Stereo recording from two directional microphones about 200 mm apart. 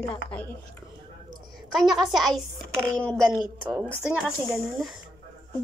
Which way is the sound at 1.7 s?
Centre (ahead or behind).